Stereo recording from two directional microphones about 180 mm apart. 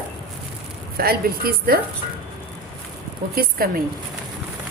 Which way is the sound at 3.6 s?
50° right (ahead or behind).